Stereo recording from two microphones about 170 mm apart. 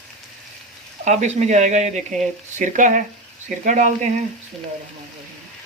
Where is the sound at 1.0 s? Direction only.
45° right (ahead or behind).